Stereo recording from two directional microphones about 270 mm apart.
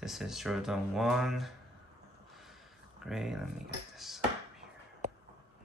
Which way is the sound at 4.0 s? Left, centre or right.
Centre.